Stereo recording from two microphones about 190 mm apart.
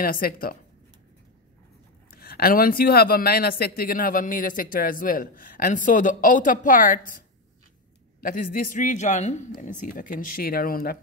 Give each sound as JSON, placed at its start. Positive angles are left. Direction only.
{"t": 0.0, "sound": "speech", "side_deg": 50}
{"t": 2.0, "sound": "speech", "side_deg": 50}